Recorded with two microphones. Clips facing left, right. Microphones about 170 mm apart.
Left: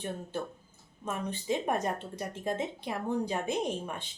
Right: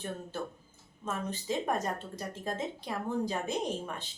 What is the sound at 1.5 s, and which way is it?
A woman's voice, 15° left (ahead or behind).